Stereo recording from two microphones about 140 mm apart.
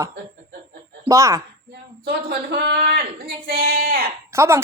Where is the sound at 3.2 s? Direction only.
90° right.